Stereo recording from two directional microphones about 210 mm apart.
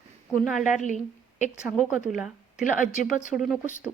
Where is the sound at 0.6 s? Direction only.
35° left (ahead or behind).